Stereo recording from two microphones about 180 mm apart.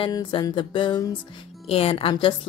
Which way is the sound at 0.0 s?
25° left (ahead or behind).